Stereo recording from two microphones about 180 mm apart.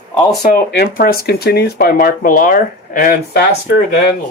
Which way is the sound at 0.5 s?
60° left (ahead or behind).